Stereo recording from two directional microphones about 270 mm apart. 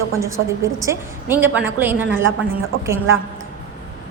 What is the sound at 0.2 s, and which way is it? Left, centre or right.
A woman's voice, centre.